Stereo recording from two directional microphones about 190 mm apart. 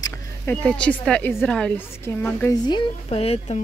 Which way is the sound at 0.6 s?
5° left (ahead or behind).